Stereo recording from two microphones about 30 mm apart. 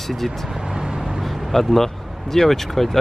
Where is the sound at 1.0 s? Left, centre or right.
Centre.